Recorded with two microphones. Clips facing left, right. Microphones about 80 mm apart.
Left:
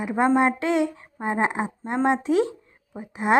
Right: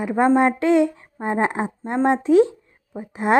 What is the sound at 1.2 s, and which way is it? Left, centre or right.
Speech, centre.